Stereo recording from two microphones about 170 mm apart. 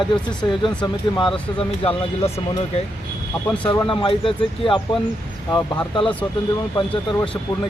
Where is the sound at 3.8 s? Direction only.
30° left (ahead or behind).